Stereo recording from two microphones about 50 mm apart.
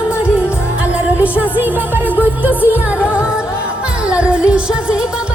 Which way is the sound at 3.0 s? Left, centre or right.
Right.